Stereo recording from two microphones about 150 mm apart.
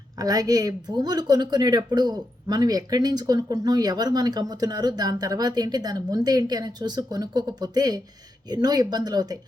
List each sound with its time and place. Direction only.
0.2 s speech: 25° right (ahead or behind)